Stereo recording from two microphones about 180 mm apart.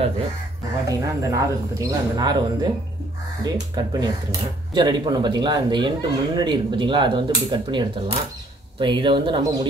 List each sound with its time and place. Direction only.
0.8 s speech: 15° right (ahead or behind)
3.7 s speech: 20° right (ahead or behind)